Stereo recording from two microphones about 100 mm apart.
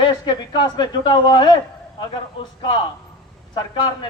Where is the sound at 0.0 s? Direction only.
45° left (ahead or behind).